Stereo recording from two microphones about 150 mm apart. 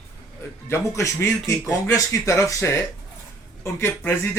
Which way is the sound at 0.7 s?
20° left (ahead or behind).